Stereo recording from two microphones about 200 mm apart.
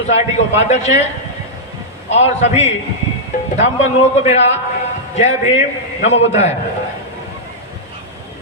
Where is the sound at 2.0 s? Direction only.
35° left (ahead or behind).